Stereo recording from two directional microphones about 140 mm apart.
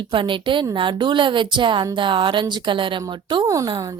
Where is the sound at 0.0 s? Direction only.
35° right (ahead or behind).